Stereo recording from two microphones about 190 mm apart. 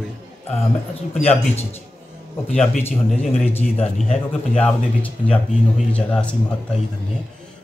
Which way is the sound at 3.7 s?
35° left (ahead or behind).